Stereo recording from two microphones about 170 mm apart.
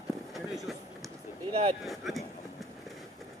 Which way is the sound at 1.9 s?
Centre (ahead or behind).